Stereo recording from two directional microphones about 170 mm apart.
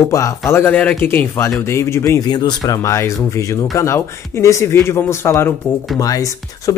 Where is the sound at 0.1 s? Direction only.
15° left (ahead or behind).